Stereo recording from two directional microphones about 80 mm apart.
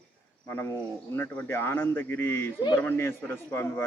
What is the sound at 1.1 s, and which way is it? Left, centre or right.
A man's voice, left.